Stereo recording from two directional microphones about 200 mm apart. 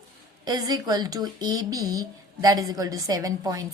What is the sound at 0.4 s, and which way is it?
Speech, 20° right (ahead or behind).